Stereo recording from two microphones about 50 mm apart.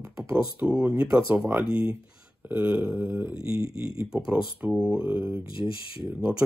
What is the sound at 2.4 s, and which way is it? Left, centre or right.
Speech, right.